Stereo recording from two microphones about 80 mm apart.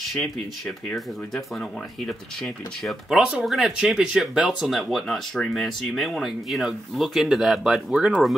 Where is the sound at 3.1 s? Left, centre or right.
Centre.